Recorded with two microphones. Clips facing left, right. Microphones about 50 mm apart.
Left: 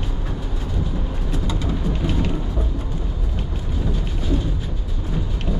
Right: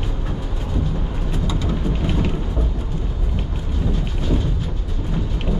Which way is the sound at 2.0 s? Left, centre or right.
Centre.